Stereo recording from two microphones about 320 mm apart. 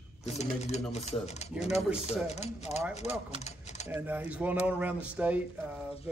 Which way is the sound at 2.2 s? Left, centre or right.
Centre.